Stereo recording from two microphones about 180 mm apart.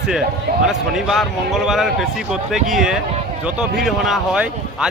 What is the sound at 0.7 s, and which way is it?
A man's voice, centre (ahead or behind).